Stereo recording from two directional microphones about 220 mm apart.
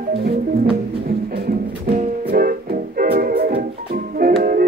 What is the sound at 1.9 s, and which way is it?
Music, 40° right (ahead or behind).